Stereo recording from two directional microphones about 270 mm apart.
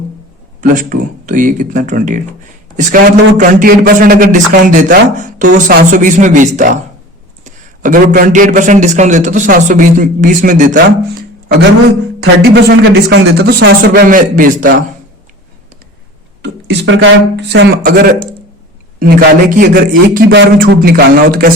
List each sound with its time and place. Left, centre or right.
0.6 s a man's voice: right
12.2 s speech: right
16.4 s speech: right
19.5 s speech: right